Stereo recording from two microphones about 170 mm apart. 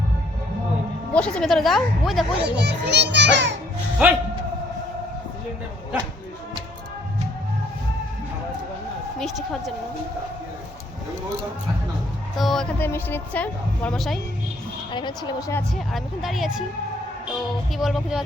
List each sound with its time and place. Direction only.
1.1 s a woman's voice: 5° left (ahead or behind)
2.4 s a child's voice: 80° right
4.0 s a man's voice: 10° right (ahead or behind)
9.1 s a woman's voice: centre (ahead or behind)
12.4 s a woman's voice: centre (ahead or behind)
12.8 s a woman's voice: 10° left (ahead or behind)
14.9 s a woman's voice: 25° left (ahead or behind)
15.7 s a woman's voice: centre (ahead or behind)
17.7 s a woman's voice: centre (ahead or behind)